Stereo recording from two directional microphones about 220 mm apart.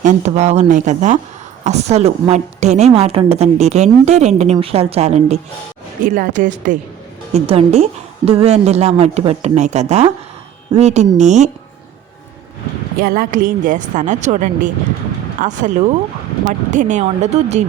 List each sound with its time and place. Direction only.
0.0 s a woman's voice: 35° right (ahead or behind)
13.0 s speech: 40° right (ahead or behind)